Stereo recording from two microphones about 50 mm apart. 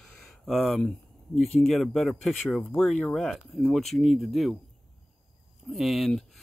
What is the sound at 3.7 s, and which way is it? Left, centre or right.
Speech, centre.